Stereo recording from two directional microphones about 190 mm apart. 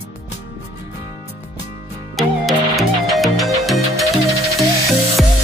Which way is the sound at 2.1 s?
Centre (ahead or behind).